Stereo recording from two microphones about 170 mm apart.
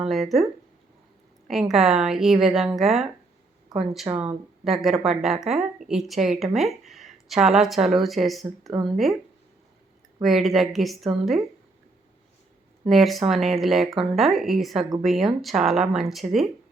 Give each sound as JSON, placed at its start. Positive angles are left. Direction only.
{"t": 0.0, "sound": "a woman's voice", "side_deg": 0}
{"t": 1.5, "sound": "a woman's voice", "side_deg": 0}
{"t": 4.1, "sound": "speech", "side_deg": -20}
{"t": 4.6, "sound": "a woman's voice", "side_deg": 0}
{"t": 10.2, "sound": "a woman's voice", "side_deg": 0}
{"t": 12.8, "sound": "a woman's voice", "side_deg": 0}